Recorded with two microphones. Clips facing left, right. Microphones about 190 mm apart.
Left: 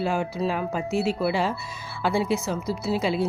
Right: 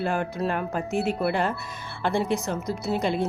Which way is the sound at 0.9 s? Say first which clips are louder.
Left 1 dB; 55° right (ahead or behind).